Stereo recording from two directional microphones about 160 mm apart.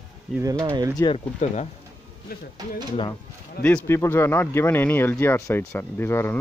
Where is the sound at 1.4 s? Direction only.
45° left (ahead or behind).